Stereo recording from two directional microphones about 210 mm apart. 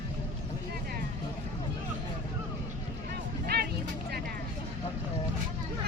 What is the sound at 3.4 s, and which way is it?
Music, 50° right (ahead or behind).